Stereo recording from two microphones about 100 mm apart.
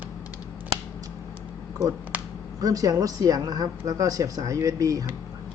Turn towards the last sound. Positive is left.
turn(degrees=-35)  # may be behind; listen again after turning